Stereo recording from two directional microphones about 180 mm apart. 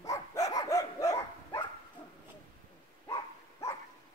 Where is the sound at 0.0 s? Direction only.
20° left (ahead or behind).